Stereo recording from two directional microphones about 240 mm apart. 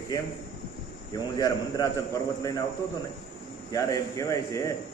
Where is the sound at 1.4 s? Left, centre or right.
Centre.